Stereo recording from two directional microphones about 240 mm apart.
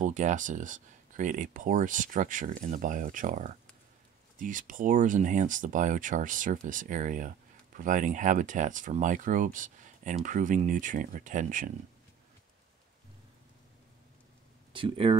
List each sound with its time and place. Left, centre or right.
0.0 s speech: right
14.7 s speech: right